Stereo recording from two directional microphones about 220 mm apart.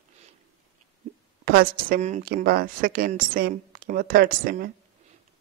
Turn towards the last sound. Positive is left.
turn(degrees=-40)  # may be behind; listen again after turning